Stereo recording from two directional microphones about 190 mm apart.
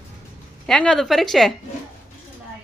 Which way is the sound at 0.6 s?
5° left (ahead or behind).